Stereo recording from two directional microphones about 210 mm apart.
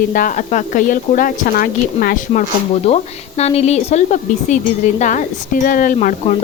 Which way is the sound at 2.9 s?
30° left (ahead or behind).